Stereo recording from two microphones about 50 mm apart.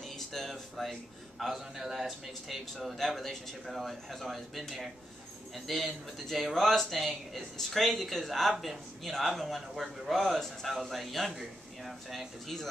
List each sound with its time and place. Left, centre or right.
0.0 s music: centre
1.4 s speech: centre